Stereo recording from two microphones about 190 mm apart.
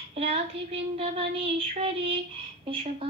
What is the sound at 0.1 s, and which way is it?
A woman's voice, 35° right (ahead or behind).